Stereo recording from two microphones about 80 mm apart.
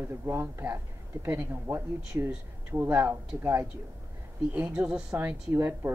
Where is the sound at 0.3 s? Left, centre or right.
Right.